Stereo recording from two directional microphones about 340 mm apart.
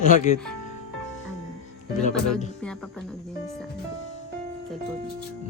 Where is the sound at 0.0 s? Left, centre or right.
Left.